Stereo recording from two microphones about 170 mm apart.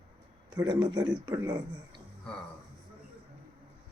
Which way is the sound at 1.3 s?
15° right (ahead or behind).